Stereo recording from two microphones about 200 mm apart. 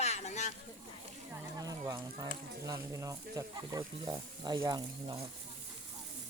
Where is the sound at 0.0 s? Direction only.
35° left (ahead or behind).